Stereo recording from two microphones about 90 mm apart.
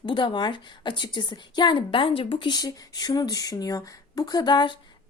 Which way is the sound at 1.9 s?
85° left.